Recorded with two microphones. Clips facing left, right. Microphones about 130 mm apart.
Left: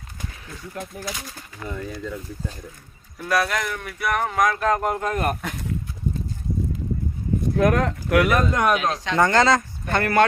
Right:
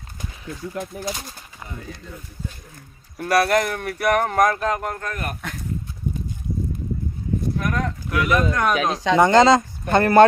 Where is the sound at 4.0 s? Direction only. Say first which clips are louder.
Right 5 dB; 75° right (ahead or behind).